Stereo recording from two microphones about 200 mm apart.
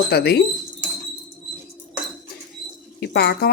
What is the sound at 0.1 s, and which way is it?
Speech, 55° left (ahead or behind).